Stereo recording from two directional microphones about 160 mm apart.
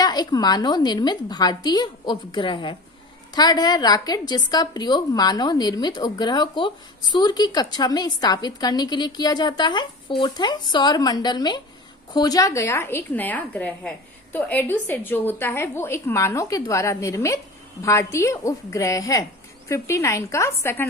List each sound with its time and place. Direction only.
0.0 s a woman's voice: 25° left (ahead or behind)